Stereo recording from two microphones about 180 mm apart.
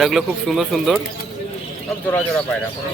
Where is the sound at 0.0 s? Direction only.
Centre (ahead or behind).